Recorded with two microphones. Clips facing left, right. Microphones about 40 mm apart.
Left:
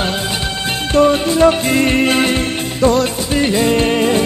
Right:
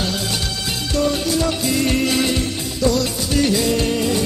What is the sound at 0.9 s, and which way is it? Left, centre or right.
Music, left.